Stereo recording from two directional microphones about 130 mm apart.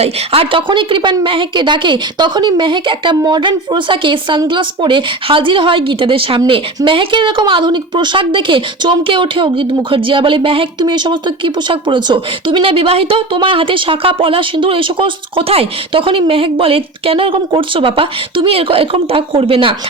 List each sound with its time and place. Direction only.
0.0 s a woman's voice: 45° right (ahead or behind)